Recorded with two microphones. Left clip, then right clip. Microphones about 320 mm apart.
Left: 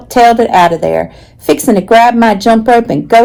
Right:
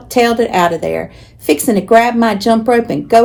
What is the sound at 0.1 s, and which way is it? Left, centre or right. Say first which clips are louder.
A woman's voice: left 6 dB; left.